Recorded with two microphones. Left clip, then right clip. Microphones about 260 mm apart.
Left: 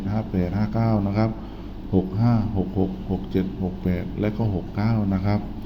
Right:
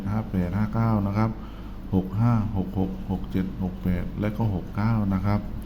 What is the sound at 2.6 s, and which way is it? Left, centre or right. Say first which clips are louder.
Speech: left 5 dB; right.